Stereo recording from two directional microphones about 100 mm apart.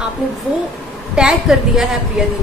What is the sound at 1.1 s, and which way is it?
Speech, 10° right (ahead or behind).